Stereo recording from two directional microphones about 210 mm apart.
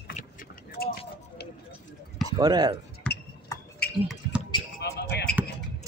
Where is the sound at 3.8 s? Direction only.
50° left (ahead or behind).